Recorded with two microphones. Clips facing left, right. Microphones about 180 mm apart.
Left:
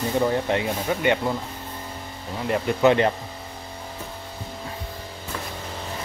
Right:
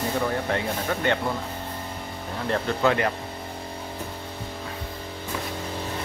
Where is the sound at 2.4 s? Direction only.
15° left (ahead or behind).